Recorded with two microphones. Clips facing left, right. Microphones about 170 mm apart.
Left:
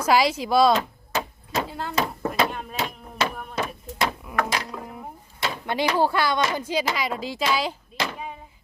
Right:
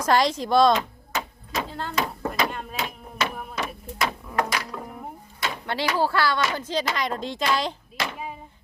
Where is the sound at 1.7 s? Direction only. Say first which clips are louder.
Left 1 dB; 5° left (ahead or behind).